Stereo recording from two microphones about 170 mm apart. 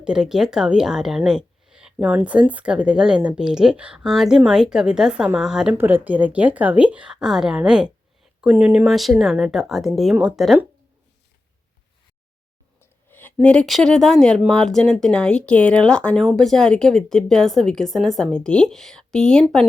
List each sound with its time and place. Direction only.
0.0 s a woman's voice: 5° right (ahead or behind)
12.8 s a woman's voice: 10° left (ahead or behind)